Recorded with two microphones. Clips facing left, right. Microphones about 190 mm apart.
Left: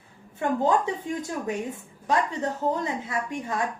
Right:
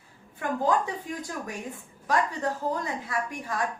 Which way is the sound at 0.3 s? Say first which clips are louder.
Left 3 dB; 25° left (ahead or behind).